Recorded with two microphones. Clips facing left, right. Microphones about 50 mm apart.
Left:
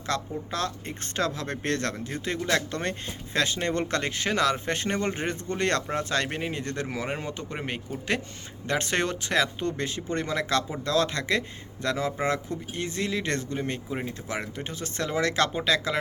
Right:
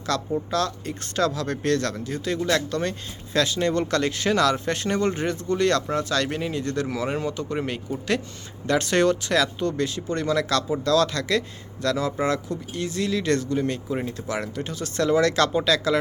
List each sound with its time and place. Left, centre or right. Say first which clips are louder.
0.0 s speech: right 5 dB; left